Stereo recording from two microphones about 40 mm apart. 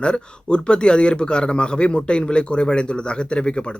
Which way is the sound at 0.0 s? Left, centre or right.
Left.